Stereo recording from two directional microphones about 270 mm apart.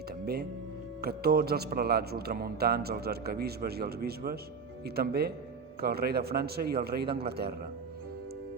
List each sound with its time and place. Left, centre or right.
1.0 s speech: right